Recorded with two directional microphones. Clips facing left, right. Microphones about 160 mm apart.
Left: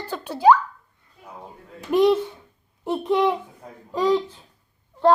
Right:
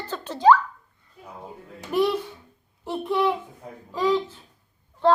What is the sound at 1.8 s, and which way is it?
A child's voice, 20° left (ahead or behind).